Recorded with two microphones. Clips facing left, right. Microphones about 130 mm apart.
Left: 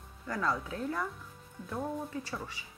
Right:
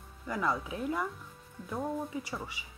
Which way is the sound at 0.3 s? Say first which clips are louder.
Right 1 dB; 15° right (ahead or behind).